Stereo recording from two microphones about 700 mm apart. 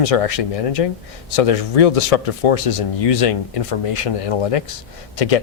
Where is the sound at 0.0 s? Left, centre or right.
Left.